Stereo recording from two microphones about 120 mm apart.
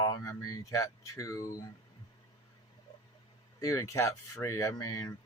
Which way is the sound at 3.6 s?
25° left (ahead or behind).